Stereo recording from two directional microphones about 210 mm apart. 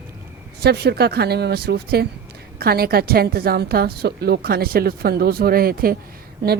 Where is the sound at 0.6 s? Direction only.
50° right (ahead or behind).